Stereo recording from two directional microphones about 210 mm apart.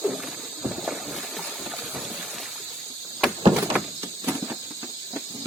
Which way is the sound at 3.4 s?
25° right (ahead or behind).